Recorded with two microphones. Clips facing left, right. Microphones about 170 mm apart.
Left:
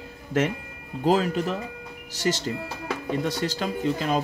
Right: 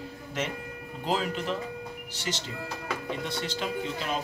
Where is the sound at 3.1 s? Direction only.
40° left (ahead or behind).